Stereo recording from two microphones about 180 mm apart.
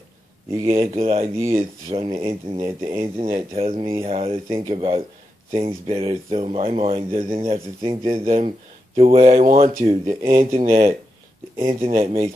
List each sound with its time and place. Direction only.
0.7 s speech: 35° right (ahead or behind)